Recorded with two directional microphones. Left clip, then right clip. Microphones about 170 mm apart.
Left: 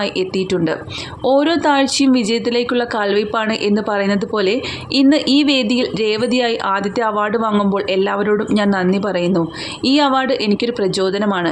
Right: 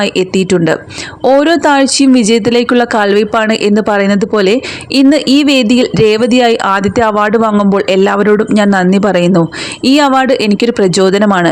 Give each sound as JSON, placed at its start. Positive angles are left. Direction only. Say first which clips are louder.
{"t": 0.0, "sound": "speech", "louder": "right 7 dB", "side_deg": -40}